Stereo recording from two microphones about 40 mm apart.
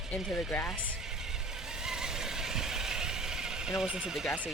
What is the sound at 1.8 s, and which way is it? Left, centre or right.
Vehicle, centre.